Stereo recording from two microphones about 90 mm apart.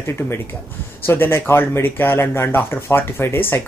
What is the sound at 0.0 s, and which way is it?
Speech, 30° left (ahead or behind).